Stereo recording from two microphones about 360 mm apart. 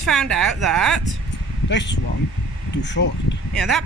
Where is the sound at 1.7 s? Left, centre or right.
Left.